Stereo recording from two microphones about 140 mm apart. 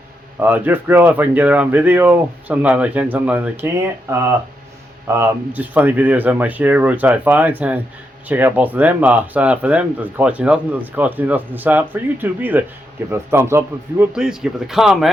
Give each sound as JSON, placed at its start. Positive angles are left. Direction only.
{"t": 0.3, "sound": "speech", "side_deg": -15}
{"t": 14.1, "sound": "speech", "side_deg": -5}